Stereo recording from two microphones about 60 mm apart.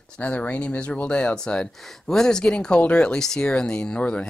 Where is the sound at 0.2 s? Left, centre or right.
Left.